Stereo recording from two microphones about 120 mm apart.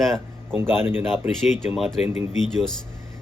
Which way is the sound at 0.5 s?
20° right (ahead or behind).